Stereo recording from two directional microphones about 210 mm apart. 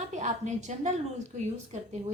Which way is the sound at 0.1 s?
35° right (ahead or behind).